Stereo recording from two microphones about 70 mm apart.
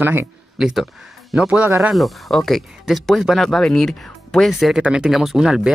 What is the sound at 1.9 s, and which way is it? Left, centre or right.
Speech, centre.